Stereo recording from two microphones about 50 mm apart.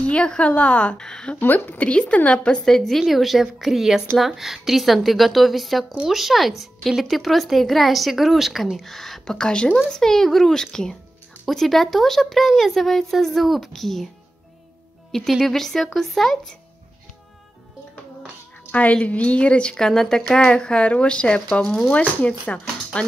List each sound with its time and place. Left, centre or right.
0.0 s a woman's voice: left
0.9 s speech: centre
1.4 s a woman's voice: left
1.9 s a woman's voice: left
2.6 s speech: centre
9.2 s a child's voice: centre
15.3 s speech: centre
18.7 s a woman's voice: left